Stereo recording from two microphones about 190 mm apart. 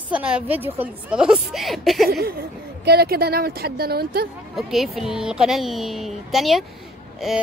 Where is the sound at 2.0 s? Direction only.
55° right (ahead or behind).